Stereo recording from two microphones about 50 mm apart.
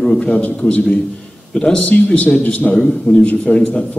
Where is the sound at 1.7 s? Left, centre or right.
Left.